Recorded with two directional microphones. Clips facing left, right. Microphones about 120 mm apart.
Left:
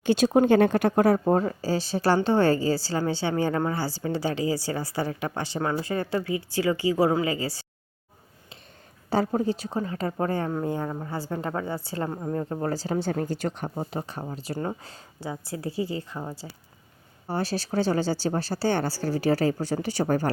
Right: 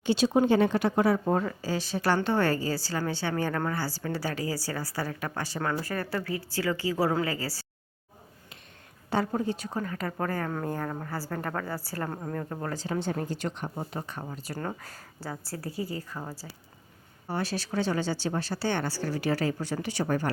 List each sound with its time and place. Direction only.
0.0 s speech: 50° left (ahead or behind)
1.2 s a woman's voice: 35° left (ahead or behind)
9.0 s a woman's voice: 35° left (ahead or behind)
13.9 s a woman's voice: 30° left (ahead or behind)
17.2 s speech: 30° left (ahead or behind)